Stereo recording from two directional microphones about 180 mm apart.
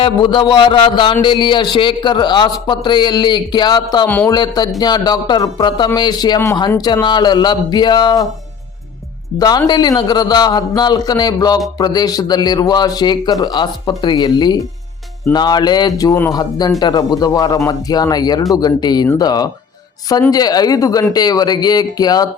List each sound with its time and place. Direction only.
0.0 s a man's voice: 25° left (ahead or behind); by 4.3 s 10° left (ahead or behind)
4.3 s a man's voice: 20° left (ahead or behind)
9.4 s a man's voice: 20° left (ahead or behind)